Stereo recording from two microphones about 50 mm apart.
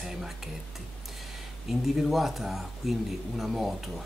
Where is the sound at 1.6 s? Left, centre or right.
Centre.